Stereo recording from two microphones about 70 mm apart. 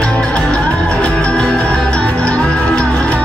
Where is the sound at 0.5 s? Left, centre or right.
Centre.